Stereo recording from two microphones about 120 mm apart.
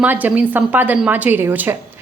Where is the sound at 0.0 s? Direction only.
15° right (ahead or behind).